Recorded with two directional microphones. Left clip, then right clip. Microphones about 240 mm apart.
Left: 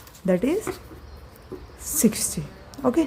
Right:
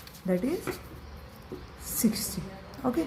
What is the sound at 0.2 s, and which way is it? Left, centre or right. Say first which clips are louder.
Speech: left 7 dB; left.